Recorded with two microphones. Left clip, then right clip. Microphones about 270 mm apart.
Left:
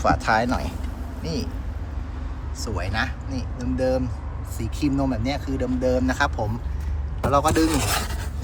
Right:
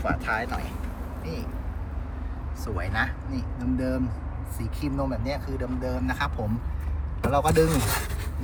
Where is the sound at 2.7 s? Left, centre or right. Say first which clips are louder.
Left 1 dB; centre.